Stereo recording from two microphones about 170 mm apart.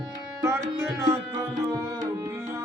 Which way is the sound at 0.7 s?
15° right (ahead or behind).